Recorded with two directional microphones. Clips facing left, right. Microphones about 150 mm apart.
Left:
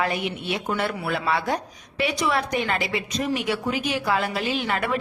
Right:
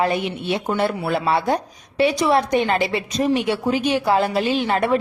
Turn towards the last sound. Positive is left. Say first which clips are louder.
# right 6 dB
turn(degrees=-30)  # may be behind; listen again after turning